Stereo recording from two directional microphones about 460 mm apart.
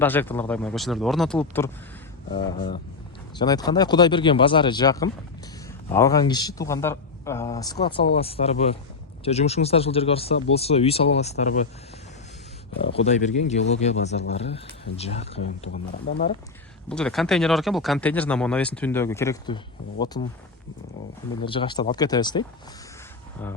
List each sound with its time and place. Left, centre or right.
0.0 s speech: centre
13.5 s speech: centre
16.9 s speech: centre
21.4 s speech: centre